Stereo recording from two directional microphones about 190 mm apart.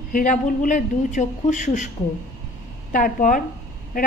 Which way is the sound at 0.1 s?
45° left (ahead or behind).